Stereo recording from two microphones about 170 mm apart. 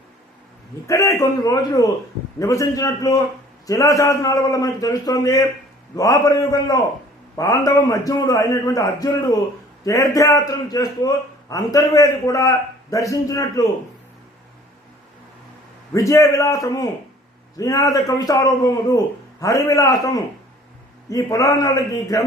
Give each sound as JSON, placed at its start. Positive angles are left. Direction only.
{"t": 0.9, "sound": "a man's voice", "side_deg": 20}
{"t": 15.9, "sound": "a man's voice", "side_deg": 20}